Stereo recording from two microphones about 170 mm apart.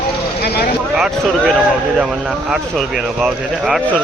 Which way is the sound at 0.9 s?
5° right (ahead or behind).